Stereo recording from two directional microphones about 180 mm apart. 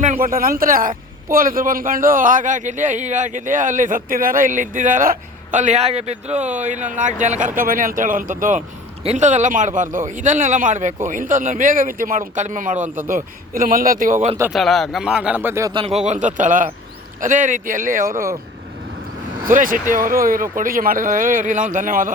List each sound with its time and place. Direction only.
0.0 s a man's voice: 45° right (ahead or behind)
14.5 s speech: centre (ahead or behind)
15.7 s speech: 30° right (ahead or behind)
16.0 s a man's voice: 45° right (ahead or behind)
19.5 s a man's voice: 50° right (ahead or behind)